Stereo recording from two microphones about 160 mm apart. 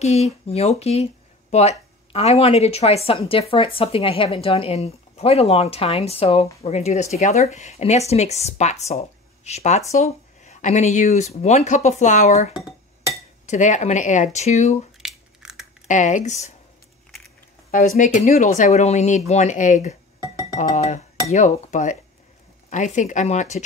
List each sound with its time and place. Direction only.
0.0 s speech: 45° left (ahead or behind)
15.0 s scissors: 5° right (ahead or behind)
15.9 s speech: 50° left (ahead or behind)
17.6 s speech: 55° left (ahead or behind)